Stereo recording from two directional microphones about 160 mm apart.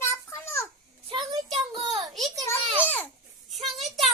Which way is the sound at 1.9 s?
Centre (ahead or behind).